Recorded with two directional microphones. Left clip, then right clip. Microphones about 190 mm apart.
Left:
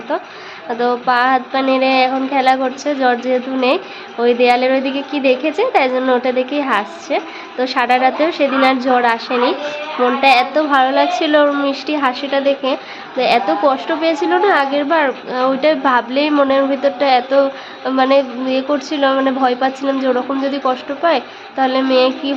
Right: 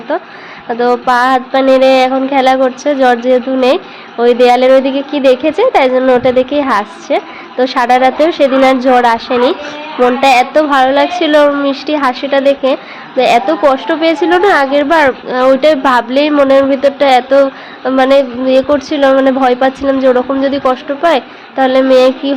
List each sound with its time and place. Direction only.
0.1 s a woman's voice: 15° right (ahead or behind)